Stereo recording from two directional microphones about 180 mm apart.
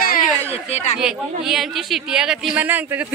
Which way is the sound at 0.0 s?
55° left (ahead or behind).